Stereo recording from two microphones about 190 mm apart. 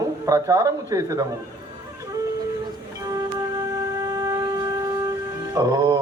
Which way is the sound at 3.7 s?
20° right (ahead or behind).